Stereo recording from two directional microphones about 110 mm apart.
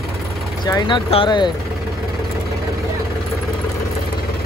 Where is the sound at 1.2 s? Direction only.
45° left (ahead or behind).